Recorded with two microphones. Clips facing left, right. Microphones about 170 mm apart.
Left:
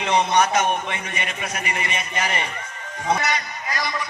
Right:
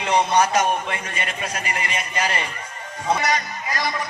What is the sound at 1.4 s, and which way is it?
Speech, 30° right (ahead or behind).